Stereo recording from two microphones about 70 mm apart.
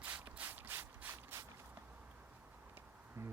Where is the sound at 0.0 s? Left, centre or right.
Right.